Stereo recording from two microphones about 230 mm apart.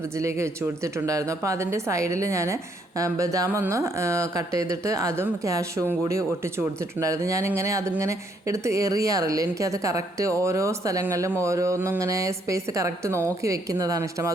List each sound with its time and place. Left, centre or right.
0.2 s speech: centre